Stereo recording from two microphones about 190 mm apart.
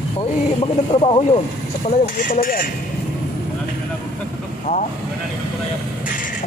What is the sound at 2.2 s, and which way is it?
Speech, 50° left (ahead or behind).